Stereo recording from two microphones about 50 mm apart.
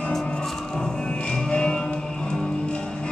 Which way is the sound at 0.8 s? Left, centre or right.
Centre.